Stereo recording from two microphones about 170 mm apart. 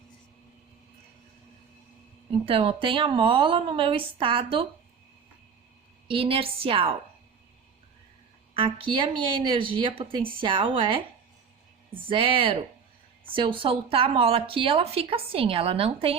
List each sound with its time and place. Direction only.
2.5 s speech: 30° right (ahead or behind)
6.1 s speech: 30° right (ahead or behind)
8.5 s speech: 30° right (ahead or behind)
12.0 s speech: 30° right (ahead or behind)